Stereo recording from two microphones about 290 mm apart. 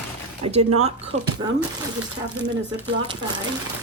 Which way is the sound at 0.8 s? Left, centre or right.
Right.